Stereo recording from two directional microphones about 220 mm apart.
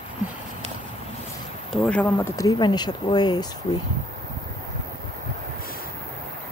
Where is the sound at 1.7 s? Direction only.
5° left (ahead or behind).